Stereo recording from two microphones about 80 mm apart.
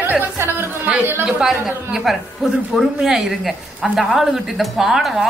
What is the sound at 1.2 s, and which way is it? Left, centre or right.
A woman's voice, centre.